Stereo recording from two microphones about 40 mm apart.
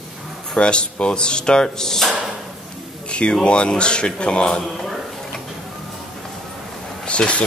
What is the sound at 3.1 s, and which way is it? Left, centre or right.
Speech, left.